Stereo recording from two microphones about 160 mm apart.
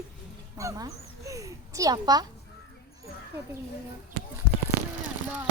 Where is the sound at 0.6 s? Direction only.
20° right (ahead or behind).